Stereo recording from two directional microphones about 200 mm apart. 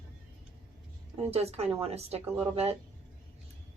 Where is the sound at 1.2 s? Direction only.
30° right (ahead or behind).